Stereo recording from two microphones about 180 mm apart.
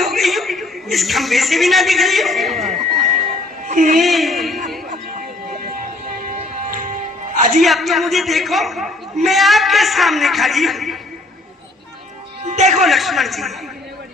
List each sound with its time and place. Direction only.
0.0 s a man's voice: centre (ahead or behind)
3.7 s speech: 45° right (ahead or behind)
4.0 s a man's voice: centre (ahead or behind)
6.2 s music: 50° right (ahead or behind)
7.3 s a man's voice: 40° right (ahead or behind)
7.6 s a man's voice: centre (ahead or behind)
12.5 s speech: 40° right (ahead or behind)
12.8 s a man's voice: centre (ahead or behind)